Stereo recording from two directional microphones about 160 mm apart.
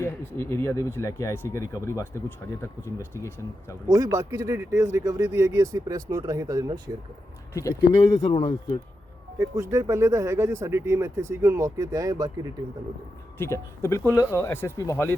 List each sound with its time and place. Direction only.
0.0 s speech: 15° left (ahead or behind)
3.8 s speech: 20° right (ahead or behind)
7.5 s speech: 20° left (ahead or behind)
8.2 s speech: 40° left (ahead or behind)
9.4 s speech: 20° right (ahead or behind)
13.4 s speech: 15° left (ahead or behind)